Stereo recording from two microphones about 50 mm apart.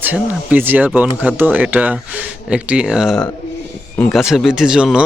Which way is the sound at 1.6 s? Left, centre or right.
Right.